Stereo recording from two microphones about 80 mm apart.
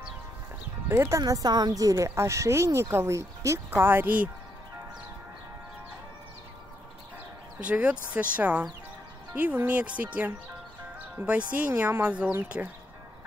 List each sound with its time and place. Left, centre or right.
0.8 s speech: right
1.2 s speech: right
7.6 s speech: centre